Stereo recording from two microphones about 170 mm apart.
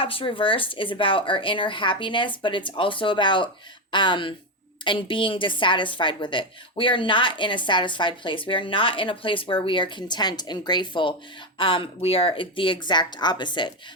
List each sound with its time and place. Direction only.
0.0 s a woman's voice: 30° left (ahead or behind)